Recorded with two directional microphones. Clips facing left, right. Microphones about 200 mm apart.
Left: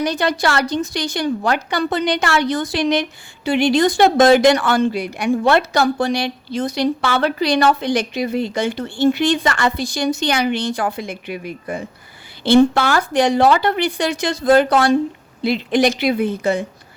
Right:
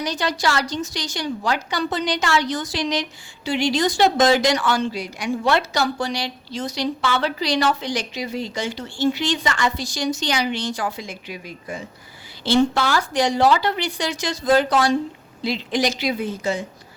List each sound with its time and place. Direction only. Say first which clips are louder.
0.0 s a woman's voice: left 5 dB; 55° left (ahead or behind)